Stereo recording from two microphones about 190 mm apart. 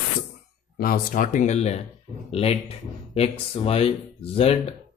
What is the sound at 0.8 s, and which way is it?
Speech, 50° left (ahead or behind).